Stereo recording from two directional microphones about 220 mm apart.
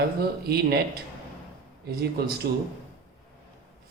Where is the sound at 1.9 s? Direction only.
40° right (ahead or behind).